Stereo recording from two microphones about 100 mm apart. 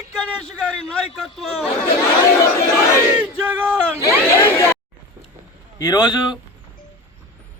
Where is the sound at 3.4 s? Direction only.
20° right (ahead or behind).